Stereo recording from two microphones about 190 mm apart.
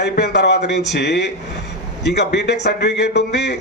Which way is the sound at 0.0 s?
65° left (ahead or behind).